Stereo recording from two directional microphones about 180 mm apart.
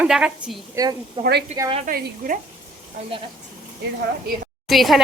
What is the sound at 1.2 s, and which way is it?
Speech, 30° right (ahead or behind).